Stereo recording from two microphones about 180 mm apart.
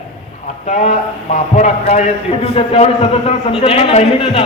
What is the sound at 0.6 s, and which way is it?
A woman's voice, 40° left (ahead or behind).